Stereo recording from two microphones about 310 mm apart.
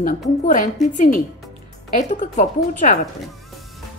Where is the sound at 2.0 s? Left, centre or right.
Left.